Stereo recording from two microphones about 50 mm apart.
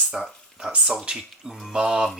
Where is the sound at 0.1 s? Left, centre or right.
Centre.